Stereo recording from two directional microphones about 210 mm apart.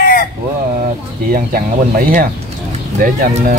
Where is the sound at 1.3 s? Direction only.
45° right (ahead or behind).